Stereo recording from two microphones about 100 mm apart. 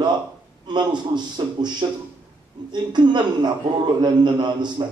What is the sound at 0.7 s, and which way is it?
A man's voice, 50° right (ahead or behind).